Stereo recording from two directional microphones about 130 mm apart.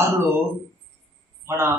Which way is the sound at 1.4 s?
20° right (ahead or behind).